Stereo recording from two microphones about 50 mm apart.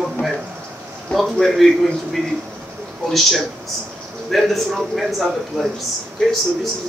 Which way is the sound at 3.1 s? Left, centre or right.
Centre.